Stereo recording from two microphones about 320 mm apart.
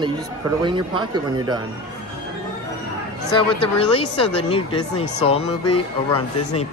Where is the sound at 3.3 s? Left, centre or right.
Centre.